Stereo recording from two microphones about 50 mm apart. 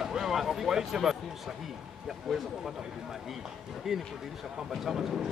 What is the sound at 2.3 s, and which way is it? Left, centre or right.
Speech, centre.